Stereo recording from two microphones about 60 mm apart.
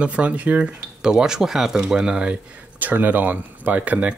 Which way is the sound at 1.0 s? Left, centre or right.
Centre.